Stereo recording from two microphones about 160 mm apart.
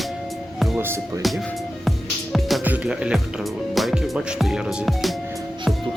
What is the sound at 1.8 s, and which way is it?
Music, centre (ahead or behind).